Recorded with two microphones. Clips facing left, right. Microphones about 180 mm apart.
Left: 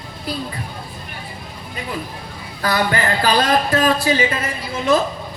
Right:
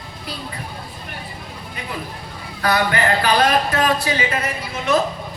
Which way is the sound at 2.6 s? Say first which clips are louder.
Even; 30° left (ahead or behind).